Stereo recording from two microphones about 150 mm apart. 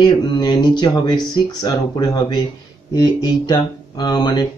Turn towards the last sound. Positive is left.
turn(degrees=30)  # may be behind; listen again after turning